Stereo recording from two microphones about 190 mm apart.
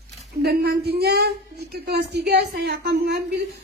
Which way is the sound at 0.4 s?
60° right (ahead or behind).